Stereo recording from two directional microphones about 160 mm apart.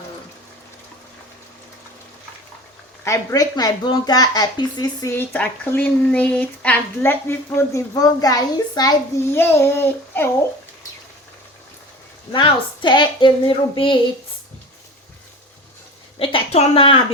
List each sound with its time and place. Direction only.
3.0 s speech: 15° left (ahead or behind)
5.1 s speech: 10° left (ahead or behind)
9.3 s speech: 15° left (ahead or behind)
12.3 s a woman's voice: 30° left (ahead or behind)
16.1 s a woman's voice: 35° left (ahead or behind)